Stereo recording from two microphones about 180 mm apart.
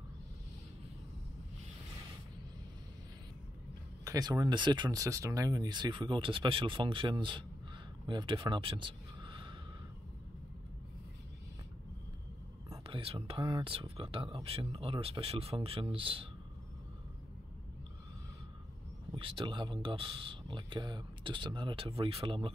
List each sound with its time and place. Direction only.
4.0 s speech: 20° right (ahead or behind)
12.8 s speech: 30° right (ahead or behind)
19.1 s speech: 30° right (ahead or behind)